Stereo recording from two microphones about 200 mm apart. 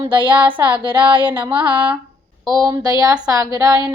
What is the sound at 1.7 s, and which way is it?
Speech, 5° right (ahead or behind).